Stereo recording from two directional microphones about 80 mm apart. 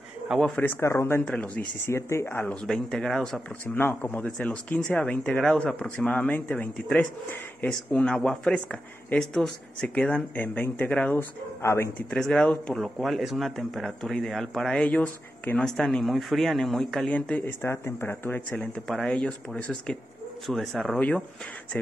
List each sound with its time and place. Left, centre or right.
0.6 s speech: left
1.2 s speech: centre
1.9 s speech: left
2.5 s speech: centre
3.6 s speech: left; by 6.0 s centre
6.0 s speech: left
11.1 s speech: left
12.1 s speech: centre
12.7 s speech: centre
14.9 s speech: centre
15.6 s speech: centre
17.5 s speech: left
18.6 s speech: centre